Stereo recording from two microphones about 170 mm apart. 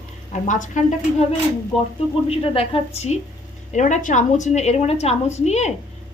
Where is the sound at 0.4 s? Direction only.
50° left (ahead or behind).